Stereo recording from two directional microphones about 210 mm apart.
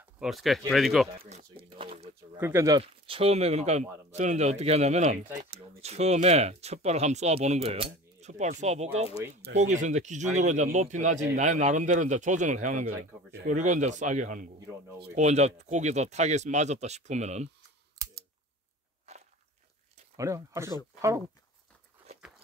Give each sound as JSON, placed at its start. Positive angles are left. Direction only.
{"t": 0.2, "sound": "speech", "side_deg": 0}
{"t": 1.1, "sound": "speech", "side_deg": -25}
{"t": 2.3, "sound": "speech", "side_deg": -10}
{"t": 2.8, "sound": "speech", "side_deg": -30}
{"t": 19.1, "sound": "biting", "side_deg": -30}
{"t": 20.2, "sound": "speech", "side_deg": -15}